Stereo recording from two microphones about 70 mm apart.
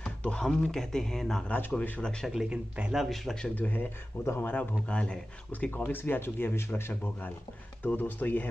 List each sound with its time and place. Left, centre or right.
0.0 s speech: centre
1.5 s speech: left
2.5 s a man's voice: centre
3.0 s a man's voice: centre
3.5 s speech: left
5.5 s speech: left